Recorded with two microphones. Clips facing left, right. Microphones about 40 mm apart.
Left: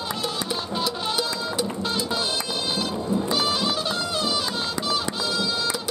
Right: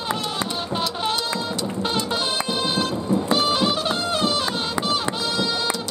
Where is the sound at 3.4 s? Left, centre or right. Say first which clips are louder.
Right 3 dB; centre.